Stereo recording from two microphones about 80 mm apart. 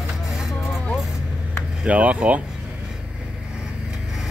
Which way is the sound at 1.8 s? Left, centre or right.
Centre.